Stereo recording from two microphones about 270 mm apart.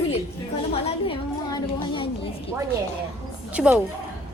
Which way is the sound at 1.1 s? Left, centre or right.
Centre.